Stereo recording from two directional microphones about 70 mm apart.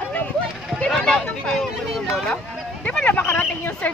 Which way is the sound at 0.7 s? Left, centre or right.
Centre.